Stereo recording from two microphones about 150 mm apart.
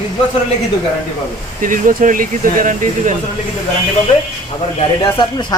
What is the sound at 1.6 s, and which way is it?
Speech, 60° right (ahead or behind).